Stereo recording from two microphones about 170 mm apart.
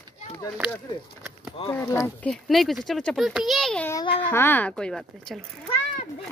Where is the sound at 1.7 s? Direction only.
20° left (ahead or behind).